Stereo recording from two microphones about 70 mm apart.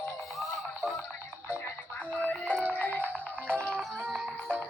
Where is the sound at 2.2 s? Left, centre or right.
Left.